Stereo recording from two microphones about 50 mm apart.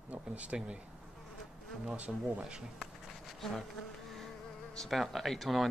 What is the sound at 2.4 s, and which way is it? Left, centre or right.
Speech, centre.